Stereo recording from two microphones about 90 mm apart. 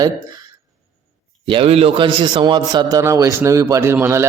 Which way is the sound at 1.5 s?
85° right.